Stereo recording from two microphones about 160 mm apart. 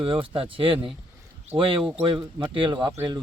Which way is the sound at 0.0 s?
35° right (ahead or behind).